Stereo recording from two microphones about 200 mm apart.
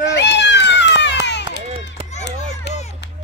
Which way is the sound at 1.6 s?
30° right (ahead or behind).